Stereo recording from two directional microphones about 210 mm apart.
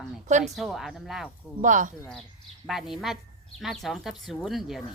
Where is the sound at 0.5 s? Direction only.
Centre (ahead or behind).